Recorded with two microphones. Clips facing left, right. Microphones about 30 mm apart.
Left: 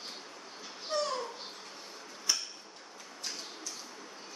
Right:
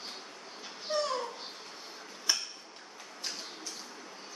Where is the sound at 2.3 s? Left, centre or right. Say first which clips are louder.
Right 1 dB; right.